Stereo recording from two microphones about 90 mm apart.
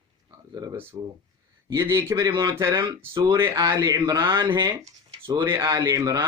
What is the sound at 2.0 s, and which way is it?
Speech, 40° right (ahead or behind).